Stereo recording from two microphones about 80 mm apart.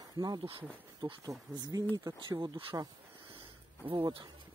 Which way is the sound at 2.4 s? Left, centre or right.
Right.